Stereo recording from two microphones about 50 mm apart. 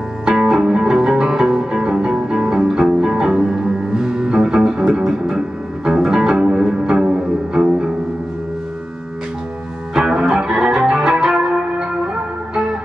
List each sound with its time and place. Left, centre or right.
0.2 s music: centre
9.9 s music: centre